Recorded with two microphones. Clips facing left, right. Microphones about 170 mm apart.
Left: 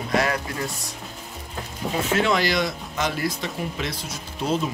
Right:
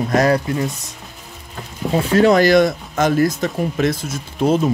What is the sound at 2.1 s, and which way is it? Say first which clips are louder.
Speech: right 11 dB; 45° right (ahead or behind).